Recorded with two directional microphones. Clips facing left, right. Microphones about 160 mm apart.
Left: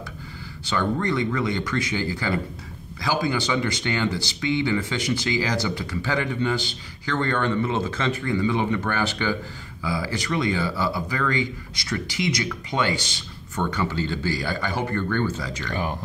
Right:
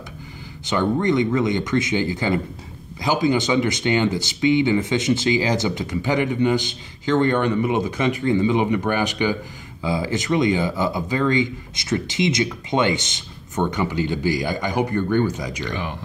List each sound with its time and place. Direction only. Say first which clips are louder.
0.7 s speech: right 4 dB; 20° right (ahead or behind)